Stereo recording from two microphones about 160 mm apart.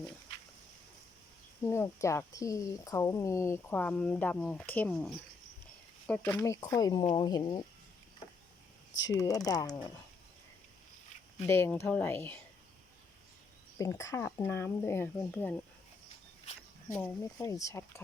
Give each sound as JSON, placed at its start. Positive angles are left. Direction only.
{"t": 1.6, "sound": "speech", "side_deg": 15}
{"t": 6.7, "sound": "speech", "side_deg": 25}
{"t": 9.1, "sound": "speech", "side_deg": 20}
{"t": 11.4, "sound": "speech", "side_deg": 15}
{"t": 14.0, "sound": "speech", "side_deg": 15}
{"t": 16.9, "sound": "speech", "side_deg": 15}